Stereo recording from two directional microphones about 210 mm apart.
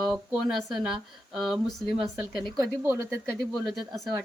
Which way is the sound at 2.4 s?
20° right (ahead or behind).